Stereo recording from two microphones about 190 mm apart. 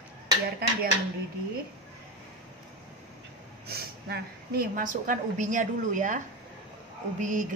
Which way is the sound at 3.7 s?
55° right (ahead or behind).